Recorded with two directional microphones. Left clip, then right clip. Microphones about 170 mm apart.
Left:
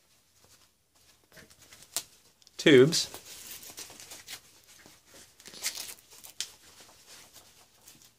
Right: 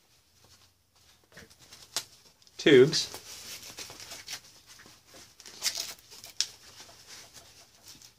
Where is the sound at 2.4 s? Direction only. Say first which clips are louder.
Even; 50° left (ahead or behind).